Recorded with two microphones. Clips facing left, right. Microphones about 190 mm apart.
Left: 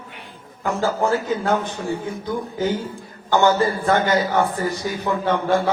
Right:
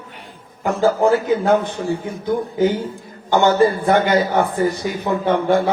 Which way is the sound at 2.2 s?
20° right (ahead or behind).